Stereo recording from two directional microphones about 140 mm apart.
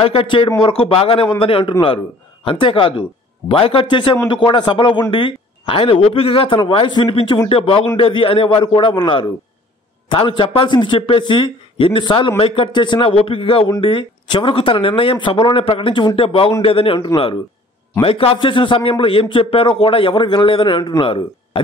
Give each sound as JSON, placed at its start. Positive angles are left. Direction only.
{"t": 0.0, "sound": "a man's voice", "side_deg": 40}